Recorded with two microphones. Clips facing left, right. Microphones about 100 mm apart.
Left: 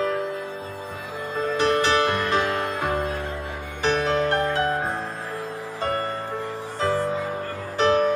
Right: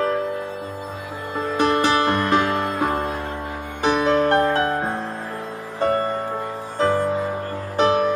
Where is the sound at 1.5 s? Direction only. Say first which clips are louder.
Right 2 dB; 50° right (ahead or behind).